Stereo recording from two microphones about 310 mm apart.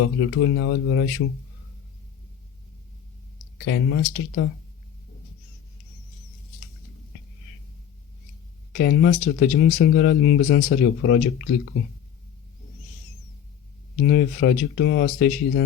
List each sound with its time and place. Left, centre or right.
0.0 s speech: left
3.6 s speech: left
8.7 s speech: left
14.0 s speech: left